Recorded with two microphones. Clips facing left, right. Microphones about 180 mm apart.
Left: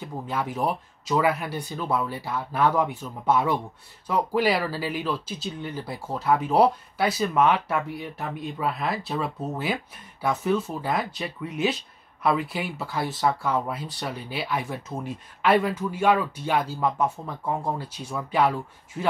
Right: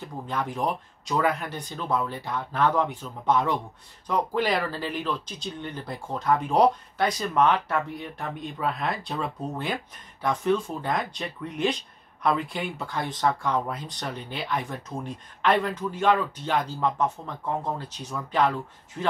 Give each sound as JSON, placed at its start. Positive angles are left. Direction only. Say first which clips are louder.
{"t": 0.0, "sound": "speech", "louder": "left 1 dB", "side_deg": 5}